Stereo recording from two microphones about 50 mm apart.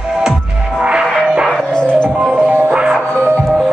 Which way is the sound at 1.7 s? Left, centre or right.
Centre.